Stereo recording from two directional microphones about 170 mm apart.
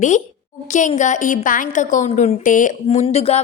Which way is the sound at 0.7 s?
45° left (ahead or behind).